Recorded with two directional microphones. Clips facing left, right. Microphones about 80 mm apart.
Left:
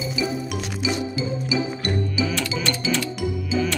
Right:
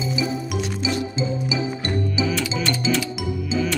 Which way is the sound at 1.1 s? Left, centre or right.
Right.